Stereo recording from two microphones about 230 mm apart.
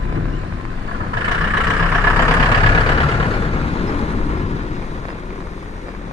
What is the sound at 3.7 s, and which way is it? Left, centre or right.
Vehicle, left.